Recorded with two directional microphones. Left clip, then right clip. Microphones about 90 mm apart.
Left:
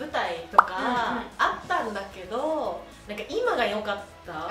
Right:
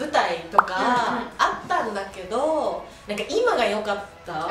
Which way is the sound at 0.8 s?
20° right (ahead or behind).